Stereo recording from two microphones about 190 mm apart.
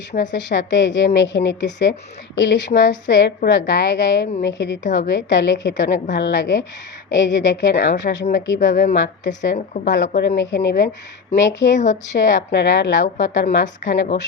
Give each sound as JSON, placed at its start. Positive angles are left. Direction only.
{"t": 0.1, "sound": "a woman's voice", "side_deg": 40}
{"t": 0.3, "sound": "a woman's voice", "side_deg": 70}
{"t": 8.7, "sound": "a woman's voice", "side_deg": 45}
{"t": 9.0, "sound": "a woman's voice", "side_deg": 65}
{"t": 12.1, "sound": "a woman's voice", "side_deg": 45}
{"t": 12.5, "sound": "a woman's voice", "side_deg": 65}